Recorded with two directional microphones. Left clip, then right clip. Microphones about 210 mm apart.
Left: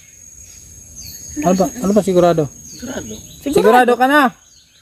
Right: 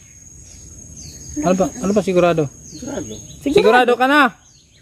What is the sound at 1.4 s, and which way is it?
Speech, 25° left (ahead or behind).